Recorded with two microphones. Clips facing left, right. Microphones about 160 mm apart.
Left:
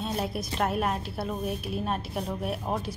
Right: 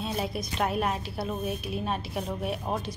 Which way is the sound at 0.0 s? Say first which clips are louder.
Left 1 dB; centre (ahead or behind).